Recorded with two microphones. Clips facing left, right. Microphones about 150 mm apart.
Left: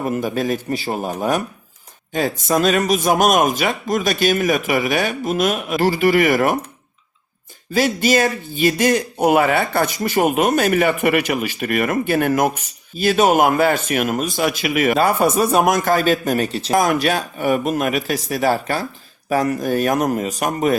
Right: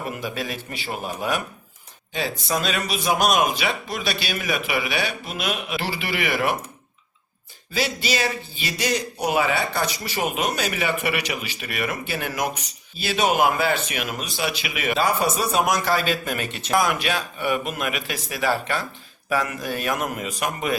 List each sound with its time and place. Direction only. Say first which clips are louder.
0.0 s a man's voice: left 8 dB; 45° left (ahead or behind)
7.7 s a man's voice: left 8 dB; 50° left (ahead or behind)